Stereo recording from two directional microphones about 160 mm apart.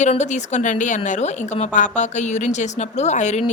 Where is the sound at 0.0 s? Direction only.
45° left (ahead or behind).